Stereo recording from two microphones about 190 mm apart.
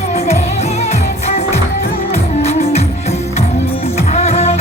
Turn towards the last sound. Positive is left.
turn(degrees=35)  # may be behind; listen again after turning